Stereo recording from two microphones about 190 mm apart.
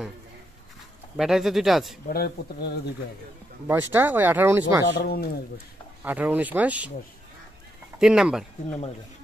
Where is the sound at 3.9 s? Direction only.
10° right (ahead or behind).